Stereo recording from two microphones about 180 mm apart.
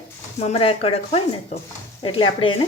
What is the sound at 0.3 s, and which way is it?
A woman's voice, 35° left (ahead or behind).